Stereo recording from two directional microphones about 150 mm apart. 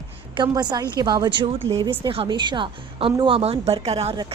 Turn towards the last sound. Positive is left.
turn(degrees=-45)  # may be behind; listen again after turning